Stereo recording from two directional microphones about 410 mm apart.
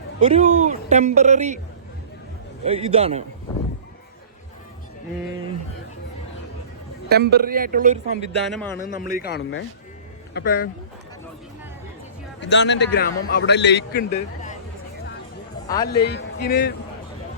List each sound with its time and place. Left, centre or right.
0.2 s a man's voice: centre
2.6 s a man's voice: centre
7.1 s speech: right
8.4 s speech: centre
9.0 s a man's voice: left
12.4 s a man's voice: left
15.6 s a man's voice: centre
15.9 s a man's voice: left